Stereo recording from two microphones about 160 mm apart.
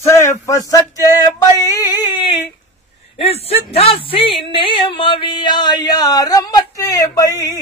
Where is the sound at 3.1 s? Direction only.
40° left (ahead or behind).